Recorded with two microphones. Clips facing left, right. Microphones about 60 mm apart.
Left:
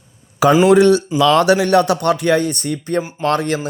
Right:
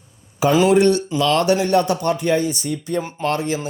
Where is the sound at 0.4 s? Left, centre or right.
Left.